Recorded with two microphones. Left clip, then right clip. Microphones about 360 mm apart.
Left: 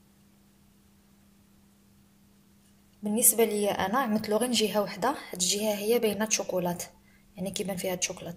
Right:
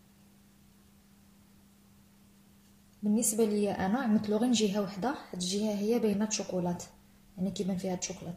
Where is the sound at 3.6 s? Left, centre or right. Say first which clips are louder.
Left 5 dB; left.